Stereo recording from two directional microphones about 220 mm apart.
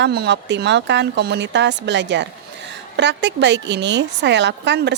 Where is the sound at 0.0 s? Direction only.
50° right (ahead or behind).